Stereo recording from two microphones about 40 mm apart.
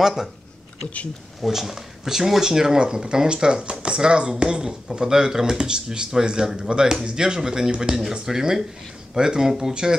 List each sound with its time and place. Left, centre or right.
0.0 s speech: centre
1.4 s speech: centre